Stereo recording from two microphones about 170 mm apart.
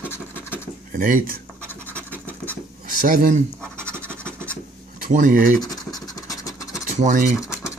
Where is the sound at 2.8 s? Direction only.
50° right (ahead or behind).